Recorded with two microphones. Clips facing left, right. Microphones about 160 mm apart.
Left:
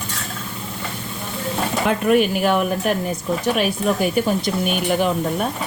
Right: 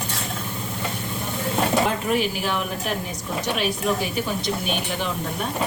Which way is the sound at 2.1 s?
55° left (ahead or behind).